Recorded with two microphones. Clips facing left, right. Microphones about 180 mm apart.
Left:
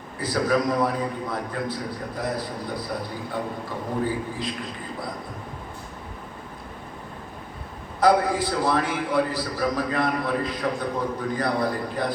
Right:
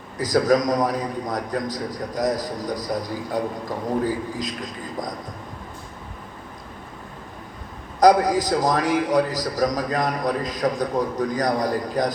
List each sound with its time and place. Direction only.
0.2 s a man's voice: 40° right (ahead or behind)
8.0 s a man's voice: 40° right (ahead or behind)